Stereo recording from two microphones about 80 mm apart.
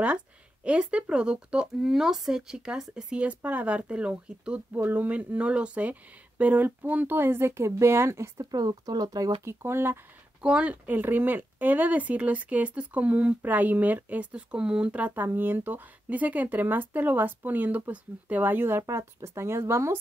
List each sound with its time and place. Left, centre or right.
0.7 s speech: centre; by 8.3 s right
8.4 s speech: right
9.4 s speech: right
10.4 s speech: centre; by 20.0 s right